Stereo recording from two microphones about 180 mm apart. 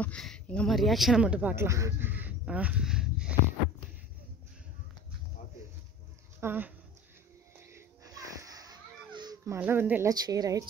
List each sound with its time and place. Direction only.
0.0 s speech: 5° left (ahead or behind)
6.4 s speech: 10° right (ahead or behind)
7.5 s a sound: 15° right (ahead or behind)
10.1 s a woman's voice: 20° right (ahead or behind)